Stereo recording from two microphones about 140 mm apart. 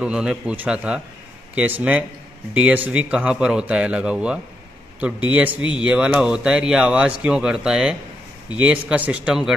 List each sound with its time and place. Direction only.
0.0 s speech: 5° right (ahead or behind)